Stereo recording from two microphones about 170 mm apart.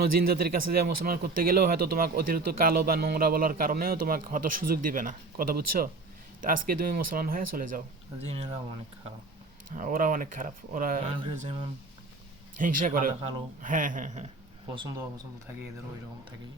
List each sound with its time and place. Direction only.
0.0 s speech: 65° right (ahead or behind)
9.7 s speech: 50° right (ahead or behind)
12.5 s speech: 50° right (ahead or behind)
14.8 s speech: 25° right (ahead or behind)